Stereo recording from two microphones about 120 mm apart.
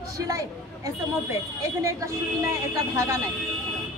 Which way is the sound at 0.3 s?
25° right (ahead or behind).